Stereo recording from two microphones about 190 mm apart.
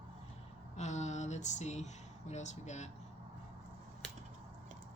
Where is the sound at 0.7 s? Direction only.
40° left (ahead or behind).